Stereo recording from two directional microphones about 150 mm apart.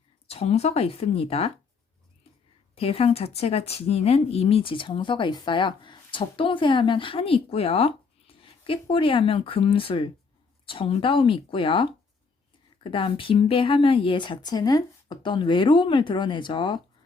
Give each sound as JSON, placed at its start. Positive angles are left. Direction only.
{"t": 0.3, "sound": "speech", "side_deg": 45}
{"t": 2.7, "sound": "speech", "side_deg": 40}